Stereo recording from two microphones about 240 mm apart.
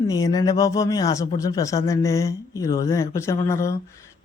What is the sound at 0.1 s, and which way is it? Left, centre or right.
A man's voice, centre.